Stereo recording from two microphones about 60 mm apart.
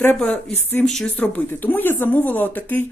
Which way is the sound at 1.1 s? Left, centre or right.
Left.